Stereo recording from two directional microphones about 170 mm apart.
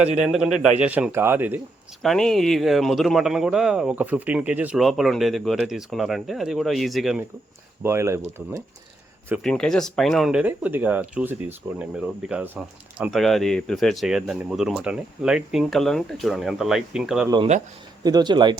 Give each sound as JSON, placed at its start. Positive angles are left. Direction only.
{"t": 0.2, "sound": "a man's voice", "side_deg": -5}
{"t": 2.0, "sound": "speech", "side_deg": 5}
{"t": 7.8, "sound": "a man's voice", "side_deg": -15}
{"t": 9.4, "sound": "speech", "side_deg": 5}
{"t": 18.0, "sound": "speech", "side_deg": -25}